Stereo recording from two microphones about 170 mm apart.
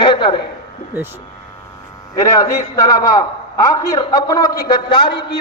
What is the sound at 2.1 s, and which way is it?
A man's voice, 20° left (ahead or behind).